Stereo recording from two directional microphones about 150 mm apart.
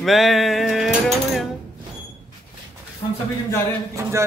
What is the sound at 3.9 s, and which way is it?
Speech, 20° right (ahead or behind).